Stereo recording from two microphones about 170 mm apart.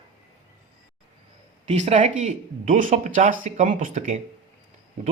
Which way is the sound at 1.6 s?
40° right (ahead or behind).